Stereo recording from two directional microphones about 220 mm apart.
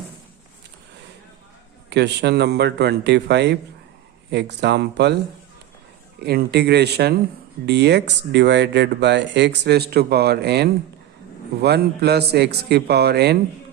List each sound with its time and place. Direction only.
1.9 s speech: 50° right (ahead or behind)
6.1 s speech: 45° right (ahead or behind)